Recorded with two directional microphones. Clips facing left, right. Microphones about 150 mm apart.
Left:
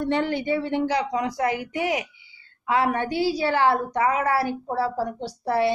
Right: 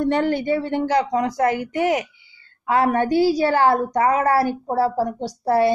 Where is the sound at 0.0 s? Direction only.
45° right (ahead or behind).